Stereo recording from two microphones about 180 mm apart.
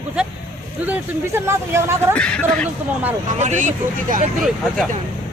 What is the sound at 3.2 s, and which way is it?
Speech, 40° right (ahead or behind).